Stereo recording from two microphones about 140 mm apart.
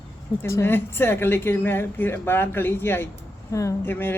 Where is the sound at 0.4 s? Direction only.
15° left (ahead or behind).